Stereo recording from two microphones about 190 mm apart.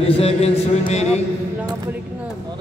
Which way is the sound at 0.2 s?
35° left (ahead or behind).